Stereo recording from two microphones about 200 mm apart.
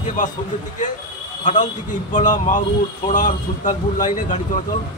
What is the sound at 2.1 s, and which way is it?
A man's voice, 40° left (ahead or behind).